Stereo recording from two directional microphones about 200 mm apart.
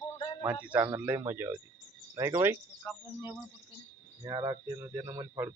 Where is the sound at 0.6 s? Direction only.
5° right (ahead or behind).